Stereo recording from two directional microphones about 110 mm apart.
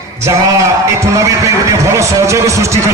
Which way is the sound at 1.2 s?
30° right (ahead or behind).